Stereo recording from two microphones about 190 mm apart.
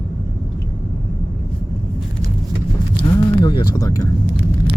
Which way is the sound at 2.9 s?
25° left (ahead or behind).